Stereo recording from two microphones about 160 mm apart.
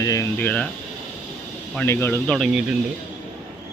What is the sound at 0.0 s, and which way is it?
Speech, 20° left (ahead or behind).